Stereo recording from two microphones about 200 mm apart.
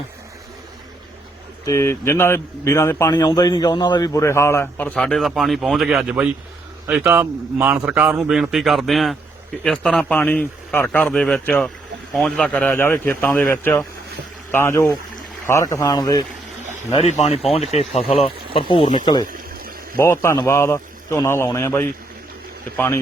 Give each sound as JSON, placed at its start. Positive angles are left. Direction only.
{"t": 1.6, "sound": "a man's voice", "side_deg": 15}
{"t": 16.9, "sound": "speech", "side_deg": 35}
{"t": 19.3, "sound": "water", "side_deg": -45}
{"t": 20.0, "sound": "a man's voice", "side_deg": 15}